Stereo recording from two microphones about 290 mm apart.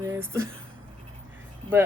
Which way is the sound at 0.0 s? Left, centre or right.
Centre.